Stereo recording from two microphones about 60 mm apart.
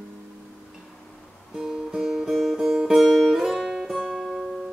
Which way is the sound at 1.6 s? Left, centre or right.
Centre.